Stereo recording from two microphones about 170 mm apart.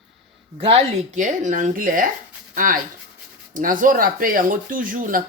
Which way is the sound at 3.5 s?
55° right (ahead or behind).